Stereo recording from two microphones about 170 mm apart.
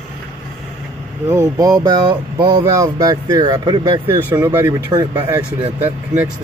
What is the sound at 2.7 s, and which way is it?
Speech, 20° right (ahead or behind).